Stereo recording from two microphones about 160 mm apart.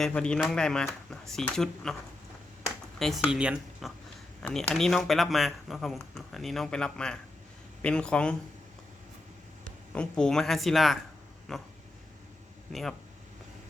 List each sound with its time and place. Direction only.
0.0 s speech: 5° left (ahead or behind)
3.0 s speech: centre (ahead or behind)
9.9 s speech: 5° left (ahead or behind)